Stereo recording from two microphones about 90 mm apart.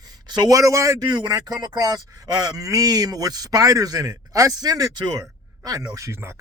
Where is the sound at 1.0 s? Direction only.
50° right (ahead or behind).